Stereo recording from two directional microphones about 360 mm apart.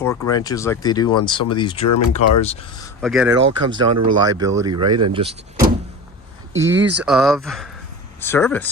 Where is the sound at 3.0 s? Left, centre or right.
Centre.